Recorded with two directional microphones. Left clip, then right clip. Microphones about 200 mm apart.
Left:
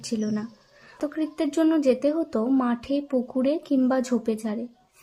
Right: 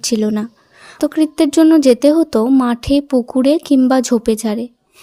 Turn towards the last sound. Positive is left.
turn(degrees=-40)  # may be behind; listen again after turning